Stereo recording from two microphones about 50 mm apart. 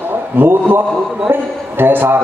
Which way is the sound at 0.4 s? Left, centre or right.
Right.